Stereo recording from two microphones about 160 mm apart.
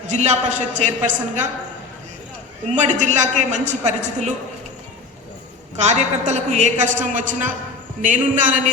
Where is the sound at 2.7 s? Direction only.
50° right (ahead or behind).